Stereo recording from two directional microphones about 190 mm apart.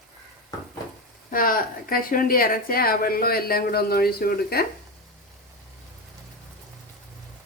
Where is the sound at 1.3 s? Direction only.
50° left (ahead or behind).